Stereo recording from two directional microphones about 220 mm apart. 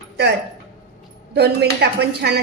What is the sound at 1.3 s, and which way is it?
A woman's voice, 50° right (ahead or behind).